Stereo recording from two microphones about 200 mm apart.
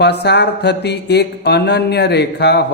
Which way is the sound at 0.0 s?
55° left (ahead or behind).